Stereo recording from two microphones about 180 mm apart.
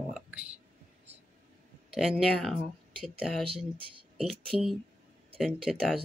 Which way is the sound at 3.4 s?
30° right (ahead or behind).